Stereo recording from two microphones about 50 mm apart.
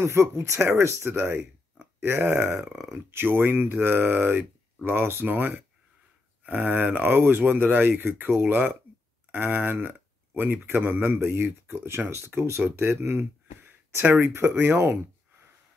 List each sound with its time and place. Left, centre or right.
0.0 s speech: right
11.1 s speech: right
12.4 s speech: right
12.6 s speech: right
12.9 s speech: right
14.2 s speech: right